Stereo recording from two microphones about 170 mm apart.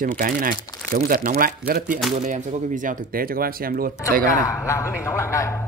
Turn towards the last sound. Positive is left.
turn(degrees=15)  # may be behind; listen again after turning